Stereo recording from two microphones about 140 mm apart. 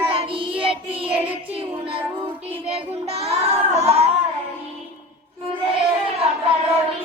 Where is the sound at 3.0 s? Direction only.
45° right (ahead or behind).